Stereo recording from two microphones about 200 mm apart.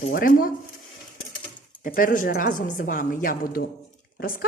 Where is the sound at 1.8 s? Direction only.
45° left (ahead or behind).